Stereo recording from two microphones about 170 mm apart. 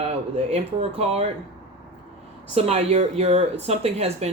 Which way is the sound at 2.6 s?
40° right (ahead or behind).